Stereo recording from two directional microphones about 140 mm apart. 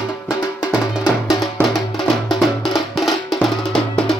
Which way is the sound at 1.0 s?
Centre (ahead or behind).